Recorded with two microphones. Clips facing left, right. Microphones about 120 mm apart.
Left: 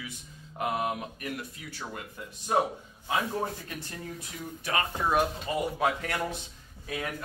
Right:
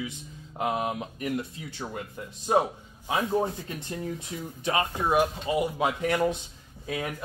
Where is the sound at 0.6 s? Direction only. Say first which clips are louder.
Right 2 dB; 20° right (ahead or behind).